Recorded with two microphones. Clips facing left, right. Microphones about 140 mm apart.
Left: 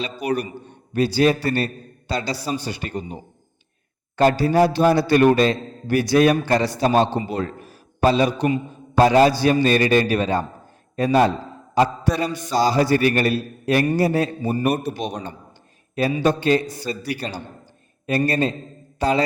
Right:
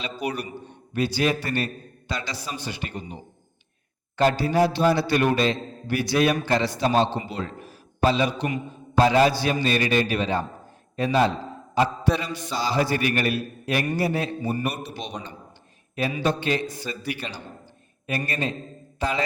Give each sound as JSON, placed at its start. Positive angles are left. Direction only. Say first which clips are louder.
{"t": 0.9, "sound": "a man's voice", "louder": "left 6 dB", "side_deg": 40}
{"t": 4.2, "sound": "a man's voice", "louder": "left 4 dB", "side_deg": 40}
{"t": 16.0, "sound": "a man's voice", "louder": "left 5 dB", "side_deg": 40}